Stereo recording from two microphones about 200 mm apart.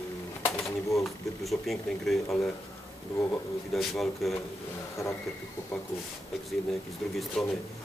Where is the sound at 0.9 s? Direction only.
Centre (ahead or behind).